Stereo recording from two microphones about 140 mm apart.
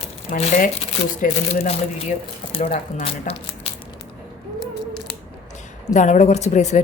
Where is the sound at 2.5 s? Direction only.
45° left (ahead or behind).